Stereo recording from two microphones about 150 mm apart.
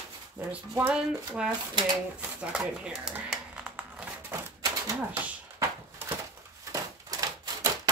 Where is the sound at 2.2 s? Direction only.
5° right (ahead or behind).